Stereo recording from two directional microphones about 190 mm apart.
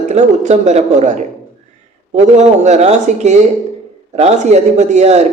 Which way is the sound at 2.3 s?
40° right (ahead or behind).